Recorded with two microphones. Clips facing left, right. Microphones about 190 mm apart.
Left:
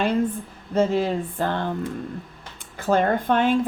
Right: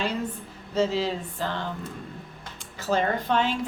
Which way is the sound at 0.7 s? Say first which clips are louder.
Left 4 dB; 50° left (ahead or behind).